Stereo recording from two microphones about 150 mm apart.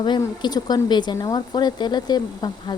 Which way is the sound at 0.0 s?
30° left (ahead or behind).